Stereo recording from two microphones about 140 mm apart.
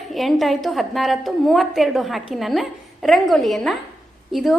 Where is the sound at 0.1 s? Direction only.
Centre (ahead or behind).